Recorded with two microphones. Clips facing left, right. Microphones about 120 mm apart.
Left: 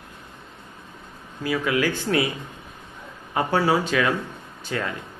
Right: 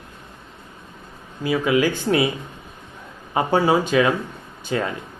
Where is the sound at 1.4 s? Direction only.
20° right (ahead or behind).